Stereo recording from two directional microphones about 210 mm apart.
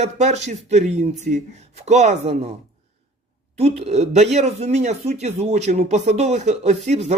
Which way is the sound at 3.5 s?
30° right (ahead or behind).